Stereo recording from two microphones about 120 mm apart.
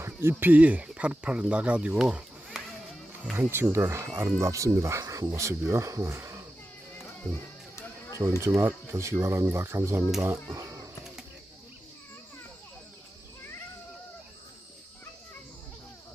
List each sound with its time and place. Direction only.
0.2 s speech: 20° right (ahead or behind)
3.3 s speech: 20° right (ahead or behind)
7.8 s a sound: 25° left (ahead or behind)
8.4 s speech: 25° right (ahead or behind)